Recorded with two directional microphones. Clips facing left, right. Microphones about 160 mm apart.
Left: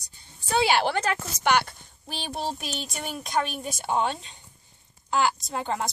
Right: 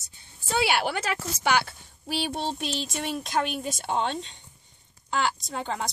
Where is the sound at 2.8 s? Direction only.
Centre (ahead or behind).